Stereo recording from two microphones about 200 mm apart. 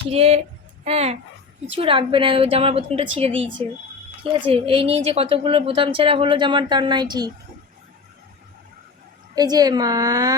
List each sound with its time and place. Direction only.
0.1 s a woman's voice: 30° right (ahead or behind)
9.3 s a woman's voice: 20° right (ahead or behind)